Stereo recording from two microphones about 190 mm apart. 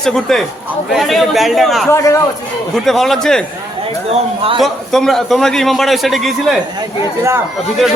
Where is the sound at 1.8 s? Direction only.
15° left (ahead or behind).